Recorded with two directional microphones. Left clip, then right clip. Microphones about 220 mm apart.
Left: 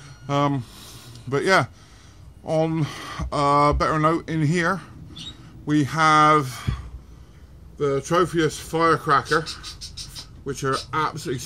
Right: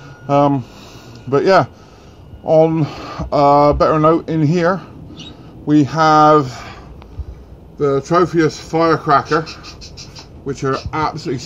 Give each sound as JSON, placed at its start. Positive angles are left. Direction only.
{"t": 0.3, "sound": "speech", "side_deg": 20}
{"t": 8.2, "sound": "a man's voice", "side_deg": 10}